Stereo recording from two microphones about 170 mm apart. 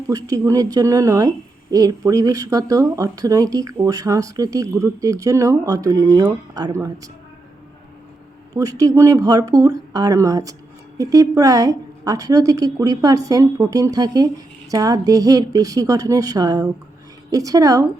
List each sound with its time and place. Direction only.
0.1 s a woman's voice: 20° right (ahead or behind)
8.5 s a woman's voice: 20° right (ahead or behind)